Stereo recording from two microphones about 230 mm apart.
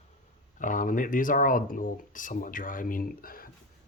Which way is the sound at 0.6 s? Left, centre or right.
Left.